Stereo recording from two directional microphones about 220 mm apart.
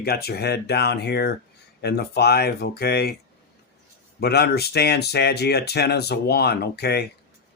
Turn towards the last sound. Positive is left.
turn(degrees=45)  # may be behind; listen again after turning